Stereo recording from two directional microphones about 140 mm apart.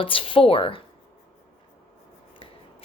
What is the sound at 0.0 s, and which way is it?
Speech, 40° left (ahead or behind).